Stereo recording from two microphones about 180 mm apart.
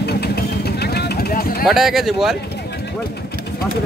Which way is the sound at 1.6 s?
Centre (ahead or behind).